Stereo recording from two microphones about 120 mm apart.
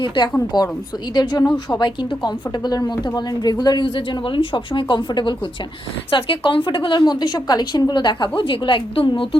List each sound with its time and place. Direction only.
0.5 s a woman's voice: 35° left (ahead or behind)